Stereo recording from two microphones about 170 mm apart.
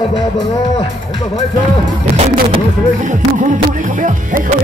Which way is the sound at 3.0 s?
50° right (ahead or behind).